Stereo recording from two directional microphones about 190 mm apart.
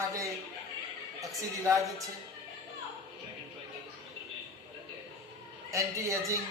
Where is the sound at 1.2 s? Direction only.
15° right (ahead or behind).